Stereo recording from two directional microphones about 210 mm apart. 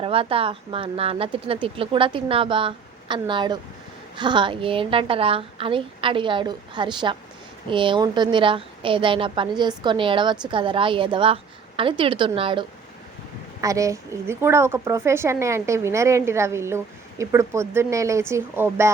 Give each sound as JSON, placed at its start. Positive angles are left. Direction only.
{"t": 0.0, "sound": "a woman's voice", "side_deg": -25}